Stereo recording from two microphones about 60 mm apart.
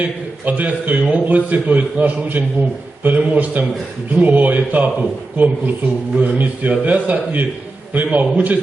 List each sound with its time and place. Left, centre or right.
0.0 s a man's voice: right